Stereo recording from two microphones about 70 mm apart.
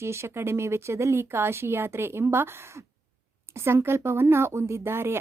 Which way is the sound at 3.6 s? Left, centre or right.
Right.